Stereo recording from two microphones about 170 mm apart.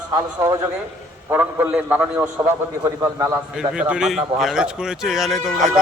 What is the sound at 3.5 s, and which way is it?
Speech, 5° right (ahead or behind).